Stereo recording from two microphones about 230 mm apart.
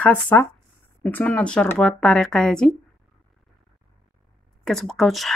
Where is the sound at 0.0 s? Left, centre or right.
Centre.